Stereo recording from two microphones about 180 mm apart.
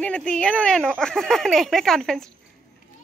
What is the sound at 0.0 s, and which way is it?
Speech, 5° left (ahead or behind).